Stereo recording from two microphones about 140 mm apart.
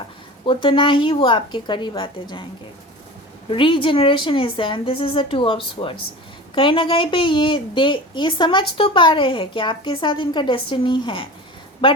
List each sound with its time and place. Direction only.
0.4 s a woman's voice: 40° left (ahead or behind)
3.5 s a woman's voice: 35° left (ahead or behind)